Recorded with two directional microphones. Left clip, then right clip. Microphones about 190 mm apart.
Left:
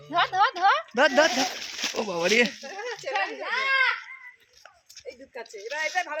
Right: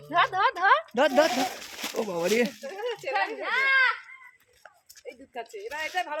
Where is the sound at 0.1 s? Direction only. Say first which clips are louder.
Left 1 dB; 15° right (ahead or behind).